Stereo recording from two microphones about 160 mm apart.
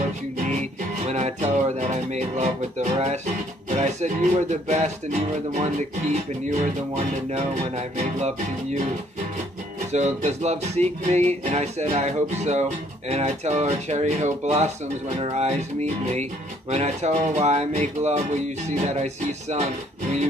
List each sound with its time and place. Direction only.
1.0 s music: 45° right (ahead or behind)
9.9 s music: 45° right (ahead or behind)